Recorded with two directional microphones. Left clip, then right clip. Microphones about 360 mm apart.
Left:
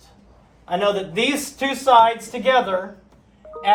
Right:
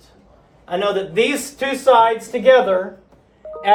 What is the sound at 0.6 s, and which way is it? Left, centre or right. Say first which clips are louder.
Speech: right 1 dB; centre.